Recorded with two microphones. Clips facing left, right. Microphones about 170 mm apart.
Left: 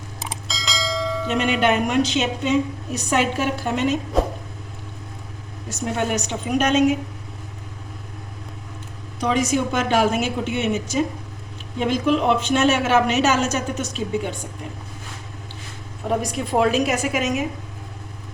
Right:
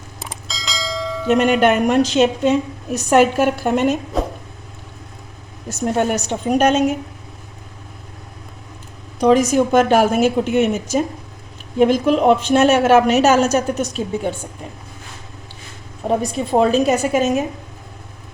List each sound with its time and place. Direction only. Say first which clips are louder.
0.2 s bell: even; centre (ahead or behind)
1.3 s a woman's voice: right 7 dB; 45° right (ahead or behind)
4.1 s vehicle: left 1 dB; centre (ahead or behind)
5.6 s a woman's voice: right 5 dB; 45° right (ahead or behind)
9.2 s a woman's voice: right 7 dB; 40° right (ahead or behind)
16.0 s a woman's voice: right 4 dB; 30° right (ahead or behind)